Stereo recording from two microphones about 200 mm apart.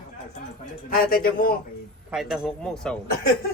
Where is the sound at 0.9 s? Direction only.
45° left (ahead or behind).